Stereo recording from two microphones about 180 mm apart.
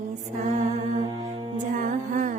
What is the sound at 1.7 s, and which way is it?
Music, 45° right (ahead or behind).